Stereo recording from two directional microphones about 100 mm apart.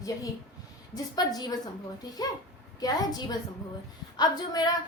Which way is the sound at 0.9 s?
40° left (ahead or behind).